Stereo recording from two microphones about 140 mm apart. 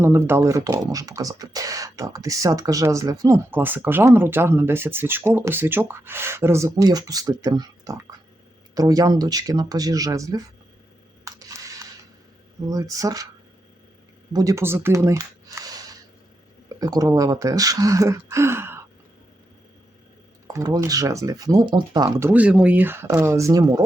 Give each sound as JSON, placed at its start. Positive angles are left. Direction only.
{"t": 0.0, "sound": "speech", "side_deg": -15}
{"t": 11.3, "sound": "a sound", "side_deg": -25}
{"t": 12.6, "sound": "speech", "side_deg": -25}
{"t": 14.3, "sound": "speech", "side_deg": -20}
{"t": 20.5, "sound": "speech", "side_deg": -25}
{"t": 22.3, "sound": "speech", "side_deg": -10}